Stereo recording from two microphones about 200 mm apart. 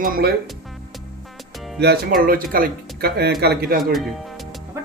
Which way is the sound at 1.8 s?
55° right (ahead or behind).